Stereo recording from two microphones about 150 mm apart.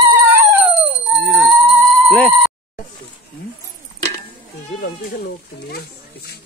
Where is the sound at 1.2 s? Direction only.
10° right (ahead or behind).